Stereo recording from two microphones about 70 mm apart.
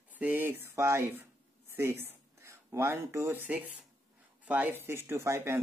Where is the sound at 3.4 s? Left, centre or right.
Right.